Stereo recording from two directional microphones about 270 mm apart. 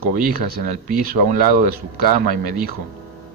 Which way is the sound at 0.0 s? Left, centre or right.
Right.